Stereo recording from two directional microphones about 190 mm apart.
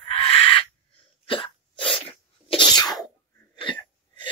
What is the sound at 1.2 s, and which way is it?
Sneeze, 30° left (ahead or behind).